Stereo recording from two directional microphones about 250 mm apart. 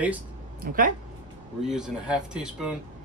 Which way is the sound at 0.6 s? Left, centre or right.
Right.